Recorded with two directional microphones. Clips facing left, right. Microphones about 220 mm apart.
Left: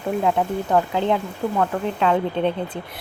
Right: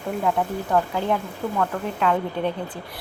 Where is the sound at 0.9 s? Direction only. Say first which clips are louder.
Left 3 dB; 20° left (ahead or behind).